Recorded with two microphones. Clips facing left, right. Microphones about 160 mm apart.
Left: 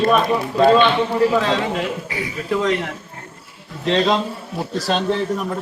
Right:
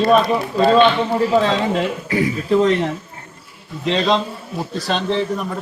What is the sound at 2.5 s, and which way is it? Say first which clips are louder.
Speech: right 4 dB; 30° right (ahead or behind).